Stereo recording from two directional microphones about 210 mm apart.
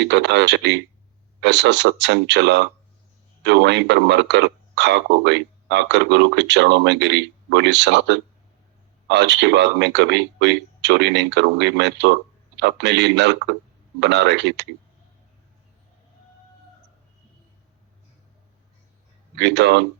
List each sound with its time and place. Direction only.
0.0 s a man's voice: 55° right (ahead or behind)
19.4 s a man's voice: 55° right (ahead or behind)